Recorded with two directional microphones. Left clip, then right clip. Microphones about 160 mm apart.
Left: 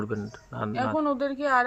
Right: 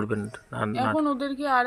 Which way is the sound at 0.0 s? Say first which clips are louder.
Right 3 dB; 15° right (ahead or behind).